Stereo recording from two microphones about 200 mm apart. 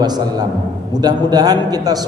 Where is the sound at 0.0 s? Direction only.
20° right (ahead or behind).